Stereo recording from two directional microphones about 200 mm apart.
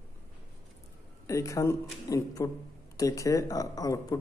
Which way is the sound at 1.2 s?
15° left (ahead or behind).